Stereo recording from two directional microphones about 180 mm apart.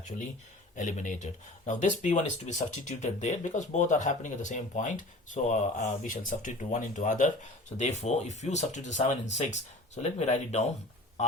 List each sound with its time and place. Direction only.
0.8 s speech: 45° left (ahead or behind)